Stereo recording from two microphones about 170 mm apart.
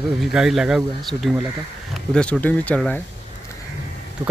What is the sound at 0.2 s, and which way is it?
Speech, 5° right (ahead or behind).